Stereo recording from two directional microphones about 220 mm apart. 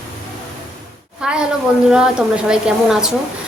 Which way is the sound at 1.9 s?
5° right (ahead or behind).